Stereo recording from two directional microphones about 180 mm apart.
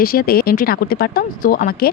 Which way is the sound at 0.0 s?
55° left (ahead or behind).